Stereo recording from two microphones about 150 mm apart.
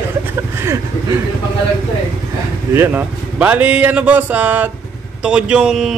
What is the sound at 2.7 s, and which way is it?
A man's voice, 15° right (ahead or behind).